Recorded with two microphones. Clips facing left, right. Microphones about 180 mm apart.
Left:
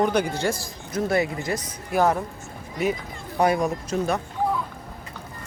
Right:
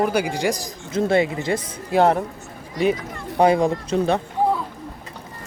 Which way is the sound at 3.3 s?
30° right (ahead or behind).